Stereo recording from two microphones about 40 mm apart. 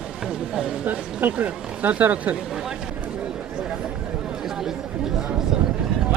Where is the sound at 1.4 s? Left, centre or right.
Right.